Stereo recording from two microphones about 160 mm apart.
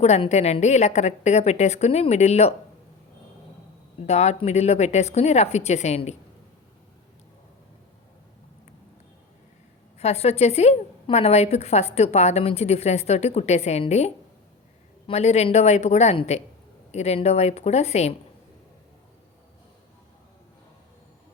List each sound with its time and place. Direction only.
0.0 s a woman's voice: 40° left (ahead or behind)
4.0 s a woman's voice: 45° left (ahead or behind)
10.0 s a woman's voice: 40° left (ahead or behind)